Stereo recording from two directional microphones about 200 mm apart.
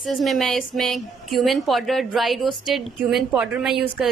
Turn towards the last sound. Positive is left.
turn(degrees=0)  # may be behind; listen again after turning